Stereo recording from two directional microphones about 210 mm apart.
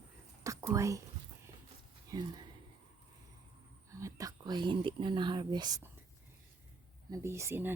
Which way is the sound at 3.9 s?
15° right (ahead or behind).